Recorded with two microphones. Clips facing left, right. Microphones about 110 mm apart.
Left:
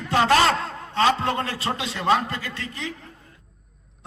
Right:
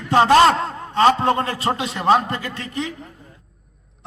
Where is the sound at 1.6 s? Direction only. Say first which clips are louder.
Right 5 dB; 40° right (ahead or behind).